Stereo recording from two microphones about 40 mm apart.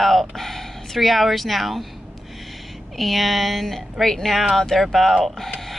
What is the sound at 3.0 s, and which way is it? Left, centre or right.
Speech, centre.